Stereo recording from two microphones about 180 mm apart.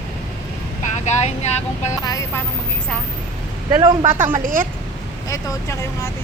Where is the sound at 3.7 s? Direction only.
25° right (ahead or behind).